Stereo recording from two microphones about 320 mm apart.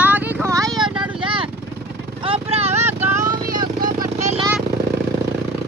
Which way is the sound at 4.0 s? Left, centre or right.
Centre.